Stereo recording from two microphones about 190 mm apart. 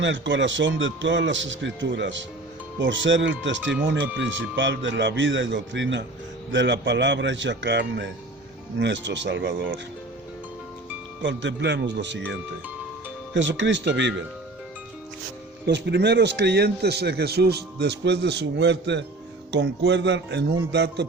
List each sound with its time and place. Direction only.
0.0 s speech: 75° right (ahead or behind)
11.2 s speech: 70° right (ahead or behind)
15.6 s speech: 60° right (ahead or behind)